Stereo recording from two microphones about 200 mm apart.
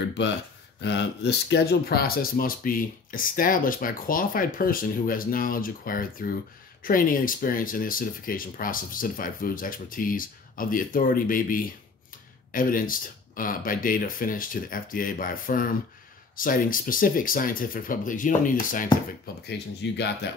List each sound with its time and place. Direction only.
0.7 s speech: 60° left (ahead or behind); by 18.9 s 40° left (ahead or behind)
19.4 s speech: 55° left (ahead or behind)